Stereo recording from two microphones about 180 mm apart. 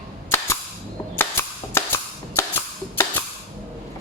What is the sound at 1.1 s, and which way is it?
Cap gun, 15° left (ahead or behind).